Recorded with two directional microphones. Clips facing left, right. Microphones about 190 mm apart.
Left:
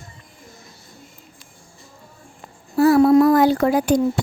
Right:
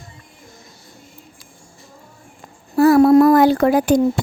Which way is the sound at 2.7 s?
50° right (ahead or behind).